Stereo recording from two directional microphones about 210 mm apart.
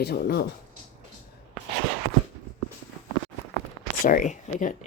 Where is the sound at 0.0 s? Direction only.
50° left (ahead or behind).